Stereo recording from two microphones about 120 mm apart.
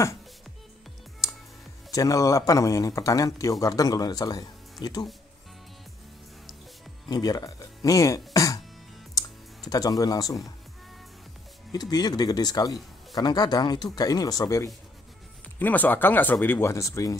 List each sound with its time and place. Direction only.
1.9 s speech: 30° left (ahead or behind)
7.1 s speech: 35° left (ahead or behind)
9.7 s speech: 30° left (ahead or behind)
11.7 s speech: 35° left (ahead or behind)
15.6 s speech: 15° left (ahead or behind)